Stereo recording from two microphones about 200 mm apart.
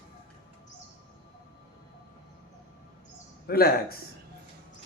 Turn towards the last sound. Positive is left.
turn(degrees=50)  # may be behind; listen again after turning